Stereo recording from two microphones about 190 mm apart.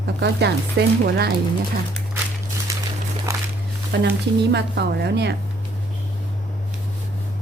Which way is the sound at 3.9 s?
65° right (ahead or behind).